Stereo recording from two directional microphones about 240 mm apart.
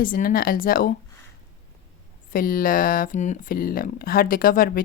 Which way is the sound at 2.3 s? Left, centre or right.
Left.